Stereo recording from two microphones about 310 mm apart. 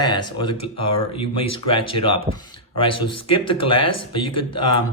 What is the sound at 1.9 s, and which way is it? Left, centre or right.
Speech, centre.